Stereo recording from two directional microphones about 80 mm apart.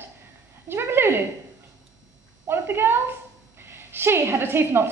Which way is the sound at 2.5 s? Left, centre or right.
Right.